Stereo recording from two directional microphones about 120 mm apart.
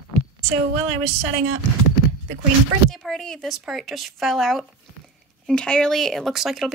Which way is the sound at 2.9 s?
5° left (ahead or behind).